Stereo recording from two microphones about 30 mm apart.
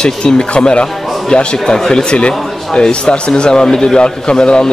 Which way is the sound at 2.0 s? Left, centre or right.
Left.